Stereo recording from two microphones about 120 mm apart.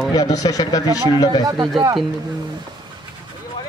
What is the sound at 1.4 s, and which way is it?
Speech, 35° right (ahead or behind).